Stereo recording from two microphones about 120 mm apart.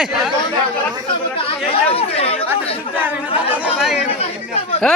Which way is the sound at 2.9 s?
15° right (ahead or behind).